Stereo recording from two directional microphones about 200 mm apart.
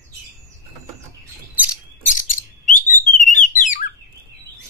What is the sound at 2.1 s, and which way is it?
Bird, 40° left (ahead or behind).